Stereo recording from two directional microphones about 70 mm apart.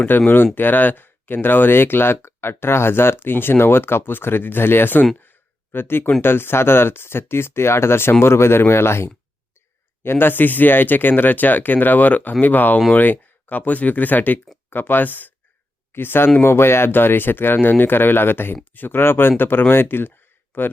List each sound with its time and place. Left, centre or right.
0.1 s speech: left